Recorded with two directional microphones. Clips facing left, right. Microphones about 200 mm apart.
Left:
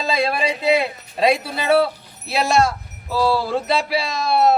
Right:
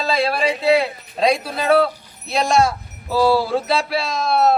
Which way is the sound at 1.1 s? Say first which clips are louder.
Even; 5° left (ahead or behind).